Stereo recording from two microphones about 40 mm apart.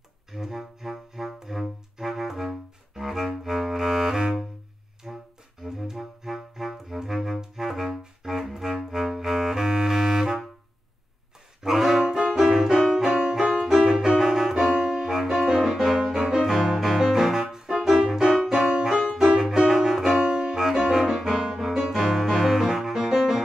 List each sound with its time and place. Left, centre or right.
0.3 s music: centre
11.6 s saxophone: centre
12.0 s brass instrument: centre
12.4 s music: centre
20.2 s music: right
20.5 s music: centre